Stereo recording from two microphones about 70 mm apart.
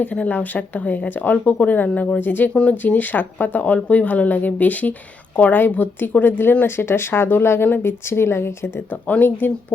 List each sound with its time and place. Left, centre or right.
0.0 s speech: left
2.5 s speech: centre